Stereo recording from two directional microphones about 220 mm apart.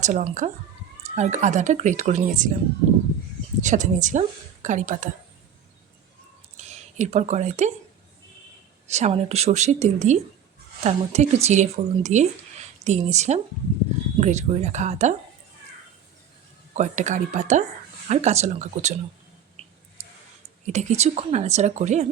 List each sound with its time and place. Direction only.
0.0 s speech: 35° right (ahead or behind)
3.6 s speech: 35° right (ahead or behind)
6.6 s speech: 30° right (ahead or behind)
8.9 s speech: 30° right (ahead or behind)
16.7 s speech: 35° right (ahead or behind)
19.6 s a sound: 25° right (ahead or behind)
20.7 s speech: 30° right (ahead or behind)